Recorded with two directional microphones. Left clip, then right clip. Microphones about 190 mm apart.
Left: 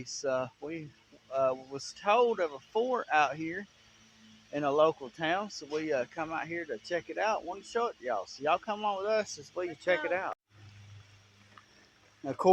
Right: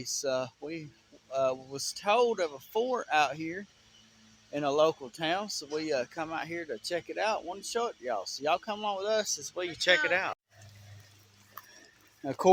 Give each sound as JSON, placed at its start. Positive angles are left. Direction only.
{"t": 0.0, "sound": "speech", "side_deg": -25}
{"t": 12.2, "sound": "speech", "side_deg": -30}